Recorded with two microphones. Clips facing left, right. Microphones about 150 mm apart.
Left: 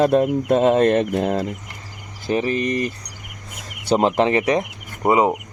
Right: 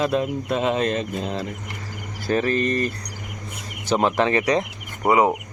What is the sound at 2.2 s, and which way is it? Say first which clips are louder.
Speech: even; 15° left (ahead or behind).